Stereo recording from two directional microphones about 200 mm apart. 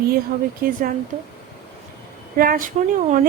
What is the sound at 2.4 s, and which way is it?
Speech, 45° right (ahead or behind).